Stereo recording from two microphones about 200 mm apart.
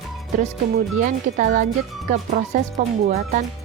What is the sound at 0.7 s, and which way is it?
Speech, 40° right (ahead or behind).